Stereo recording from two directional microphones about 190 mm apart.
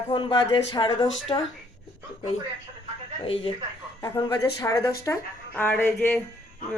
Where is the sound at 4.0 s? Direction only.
20° left (ahead or behind).